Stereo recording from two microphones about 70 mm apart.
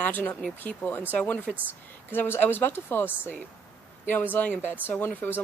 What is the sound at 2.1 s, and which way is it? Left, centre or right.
Speech, left.